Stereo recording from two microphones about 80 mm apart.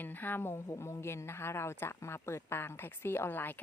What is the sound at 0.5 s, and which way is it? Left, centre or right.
Speech, left.